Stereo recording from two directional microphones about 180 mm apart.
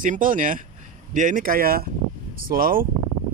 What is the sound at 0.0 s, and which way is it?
Speech, 50° right (ahead or behind).